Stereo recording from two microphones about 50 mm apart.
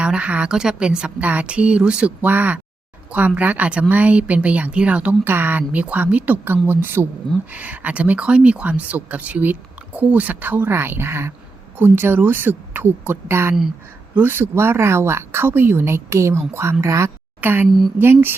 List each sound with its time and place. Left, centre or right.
0.0 s a woman's voice: right
0.4 s a woman's voice: centre
1.2 s speech: right
2.2 s speech: right
5.2 s speech: right
7.5 s speech: right
11.8 s speech: right
16.8 s a woman's voice: right
17.4 s speech: right
17.7 s speech: centre
18.0 s speech: right